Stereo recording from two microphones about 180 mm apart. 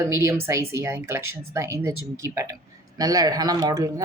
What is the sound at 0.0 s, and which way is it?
Speech, 15° right (ahead or behind).